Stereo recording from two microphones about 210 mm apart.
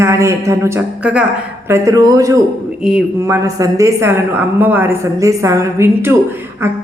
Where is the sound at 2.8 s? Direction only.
5° right (ahead or behind).